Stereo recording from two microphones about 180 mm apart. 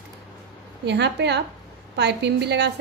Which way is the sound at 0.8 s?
70° right (ahead or behind).